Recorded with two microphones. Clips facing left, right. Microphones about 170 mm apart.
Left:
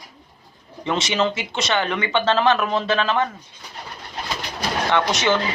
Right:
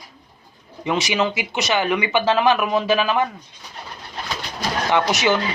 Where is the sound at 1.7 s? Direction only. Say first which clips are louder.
Right 2 dB; 20° right (ahead or behind).